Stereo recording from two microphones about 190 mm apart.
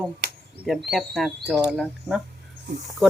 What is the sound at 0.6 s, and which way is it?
Speech, centre (ahead or behind).